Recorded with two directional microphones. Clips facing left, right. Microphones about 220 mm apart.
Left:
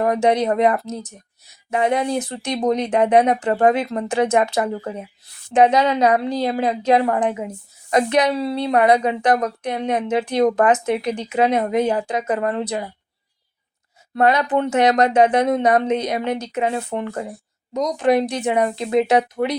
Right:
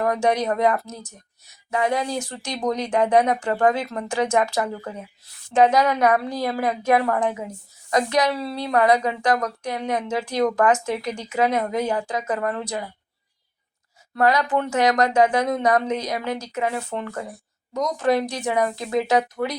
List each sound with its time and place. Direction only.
0.0 s a woman's voice: 20° left (ahead or behind)
14.2 s a woman's voice: 20° left (ahead or behind)